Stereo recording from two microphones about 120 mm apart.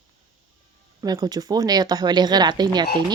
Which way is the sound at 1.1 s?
35° right (ahead or behind).